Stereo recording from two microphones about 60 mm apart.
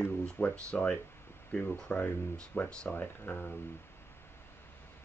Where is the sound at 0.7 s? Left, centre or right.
Centre.